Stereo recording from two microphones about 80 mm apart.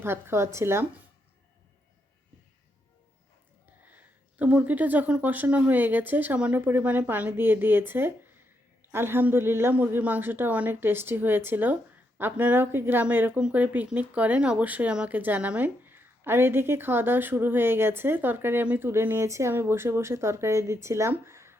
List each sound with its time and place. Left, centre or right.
0.0 s speech: right
3.8 s speech: centre